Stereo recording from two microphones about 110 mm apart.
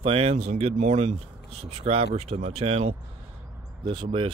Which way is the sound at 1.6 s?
60° right (ahead or behind).